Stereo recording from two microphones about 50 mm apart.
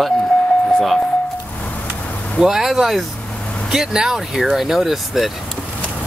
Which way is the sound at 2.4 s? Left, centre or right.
Centre.